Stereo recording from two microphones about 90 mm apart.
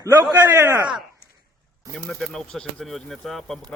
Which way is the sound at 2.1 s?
5° left (ahead or behind).